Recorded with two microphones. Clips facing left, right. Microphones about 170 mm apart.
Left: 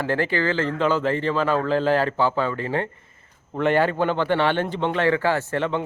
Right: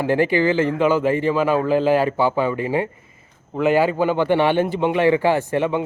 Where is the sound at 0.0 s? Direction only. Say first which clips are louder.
Right 5 dB; 15° right (ahead or behind).